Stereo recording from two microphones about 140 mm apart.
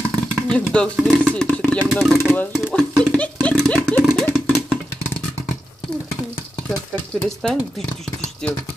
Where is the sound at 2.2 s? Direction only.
15° left (ahead or behind).